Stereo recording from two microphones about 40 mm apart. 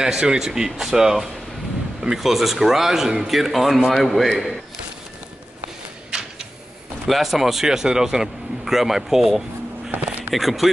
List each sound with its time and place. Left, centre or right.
0.0 s speech: centre
7.1 s speech: centre
9.9 s speech: right
10.3 s speech: centre